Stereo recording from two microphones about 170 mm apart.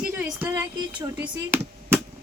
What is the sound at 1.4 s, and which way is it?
Chop, 15° right (ahead or behind).